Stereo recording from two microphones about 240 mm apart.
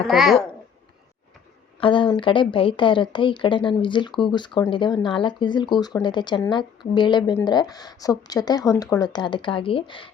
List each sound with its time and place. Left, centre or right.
0.1 s a child's voice: centre
1.8 s speech: left